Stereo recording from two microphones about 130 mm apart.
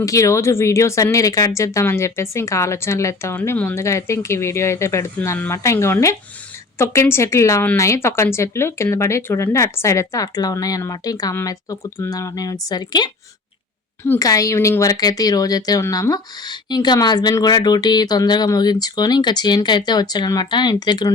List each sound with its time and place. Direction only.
0.0 s a woman's voice: 25° left (ahead or behind)